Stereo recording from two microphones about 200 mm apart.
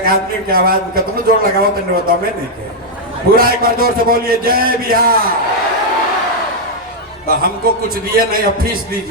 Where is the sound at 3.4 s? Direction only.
45° right (ahead or behind).